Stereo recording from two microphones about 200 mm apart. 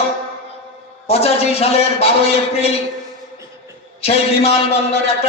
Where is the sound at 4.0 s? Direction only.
30° left (ahead or behind).